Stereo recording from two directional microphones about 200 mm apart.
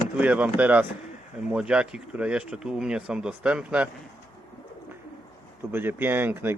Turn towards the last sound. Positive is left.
turn(degrees=-10)  # may be behind; listen again after turning